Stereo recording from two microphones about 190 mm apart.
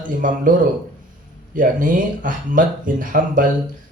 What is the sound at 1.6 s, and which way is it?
Speech, 45° right (ahead or behind).